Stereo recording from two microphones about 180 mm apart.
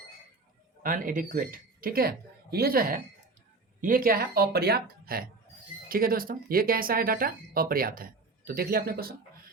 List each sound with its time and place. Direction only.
0.8 s speech: 50° right (ahead or behind)